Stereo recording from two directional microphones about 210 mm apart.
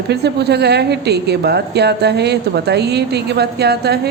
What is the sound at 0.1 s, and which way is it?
A woman's voice, 50° right (ahead or behind).